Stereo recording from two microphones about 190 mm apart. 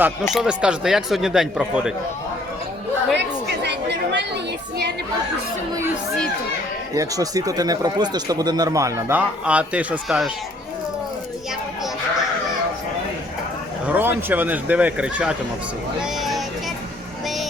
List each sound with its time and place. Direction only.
0.3 s speech: 5° right (ahead or behind)
3.2 s chatter: 60° right (ahead or behind)
6.9 s speech: 15° right (ahead or behind)
13.8 s speech: 10° right (ahead or behind)
16.0 s a sound: centre (ahead or behind)